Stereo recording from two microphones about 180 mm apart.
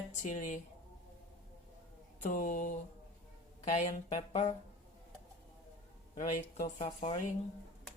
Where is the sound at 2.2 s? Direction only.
50° left (ahead or behind).